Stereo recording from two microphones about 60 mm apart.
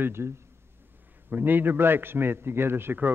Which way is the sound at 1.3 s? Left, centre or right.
Right.